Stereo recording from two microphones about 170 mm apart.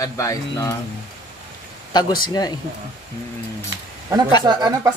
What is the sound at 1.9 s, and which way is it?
Speech, 25° left (ahead or behind).